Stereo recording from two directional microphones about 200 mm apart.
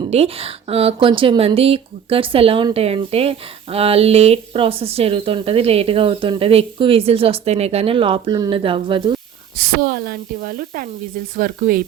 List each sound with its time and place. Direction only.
0.1 s speech: 30° right (ahead or behind)
9.6 s speech: 50° right (ahead or behind)